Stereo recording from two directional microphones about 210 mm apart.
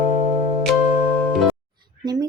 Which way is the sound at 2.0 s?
20° right (ahead or behind).